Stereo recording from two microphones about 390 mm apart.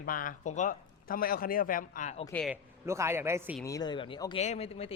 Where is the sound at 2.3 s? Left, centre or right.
Centre.